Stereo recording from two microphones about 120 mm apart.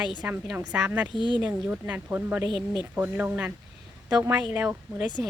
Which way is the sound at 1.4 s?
15° right (ahead or behind).